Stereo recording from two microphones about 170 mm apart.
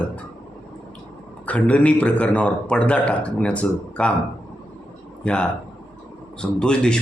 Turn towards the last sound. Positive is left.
turn(degrees=5)  # may be behind; listen again after turning